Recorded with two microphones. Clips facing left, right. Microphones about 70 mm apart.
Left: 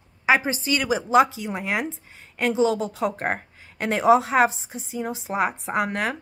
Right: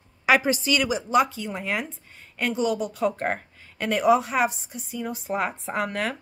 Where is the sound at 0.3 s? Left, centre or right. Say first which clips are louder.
Even; left.